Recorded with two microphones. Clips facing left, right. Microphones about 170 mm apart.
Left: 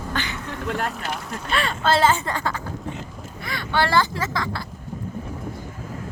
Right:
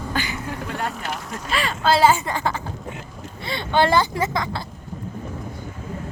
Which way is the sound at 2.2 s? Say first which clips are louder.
Right 2 dB; 15° right (ahead or behind).